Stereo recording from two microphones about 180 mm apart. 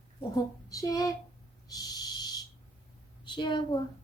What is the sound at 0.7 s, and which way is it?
Speech, 20° left (ahead or behind).